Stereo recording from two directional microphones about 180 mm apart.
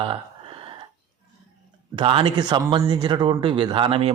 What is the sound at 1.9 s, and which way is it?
Speech, 30° right (ahead or behind).